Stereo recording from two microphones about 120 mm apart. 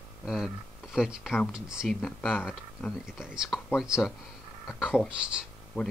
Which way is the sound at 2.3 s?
15° left (ahead or behind).